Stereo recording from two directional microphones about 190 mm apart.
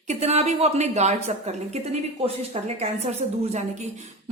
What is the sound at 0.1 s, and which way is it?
A woman's voice, 35° right (ahead or behind).